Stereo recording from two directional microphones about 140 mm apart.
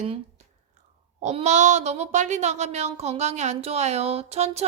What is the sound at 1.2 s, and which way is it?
Speech, 55° right (ahead or behind).